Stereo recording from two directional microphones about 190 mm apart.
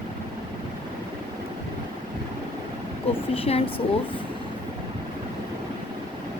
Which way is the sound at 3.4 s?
30° left (ahead or behind).